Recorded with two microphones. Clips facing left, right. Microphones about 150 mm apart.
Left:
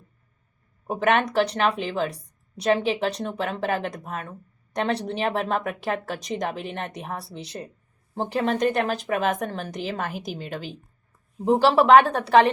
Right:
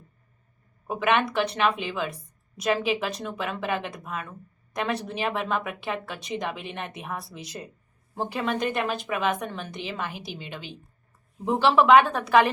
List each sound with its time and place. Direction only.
0.9 s speech: 40° left (ahead or behind)